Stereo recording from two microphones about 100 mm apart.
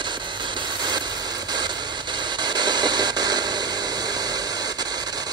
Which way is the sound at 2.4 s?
45° right (ahead or behind).